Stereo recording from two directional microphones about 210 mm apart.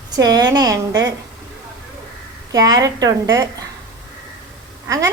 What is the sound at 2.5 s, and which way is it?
Speech, 20° right (ahead or behind).